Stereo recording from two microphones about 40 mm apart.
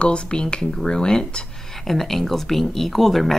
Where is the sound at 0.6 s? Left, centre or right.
Centre.